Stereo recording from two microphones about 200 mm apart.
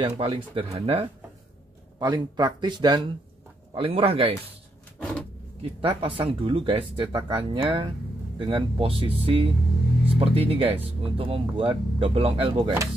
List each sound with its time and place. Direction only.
0.0 s speech: 25° right (ahead or behind)
5.6 s speech: 25° right (ahead or behind)